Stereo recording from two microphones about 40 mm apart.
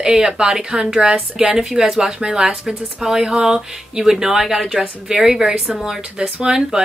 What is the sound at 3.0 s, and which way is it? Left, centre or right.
Speech, centre.